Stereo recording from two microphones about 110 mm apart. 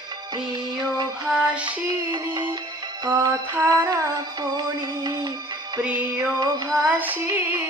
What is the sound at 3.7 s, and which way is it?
Music, 35° right (ahead or behind).